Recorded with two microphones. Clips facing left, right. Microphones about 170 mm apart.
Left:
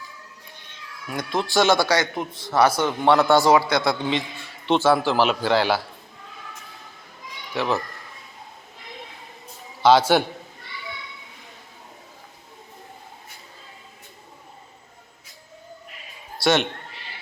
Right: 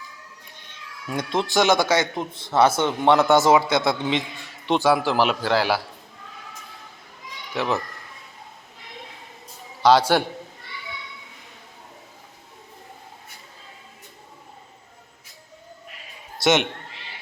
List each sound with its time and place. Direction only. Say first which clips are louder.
1.3 s a man's voice: even; 20° right (ahead or behind); by 5.8 s 5° right (ahead or behind)
9.8 s a man's voice: left 1 dB; 5° left (ahead or behind)
16.4 s a man's voice: right 1 dB; 20° right (ahead or behind)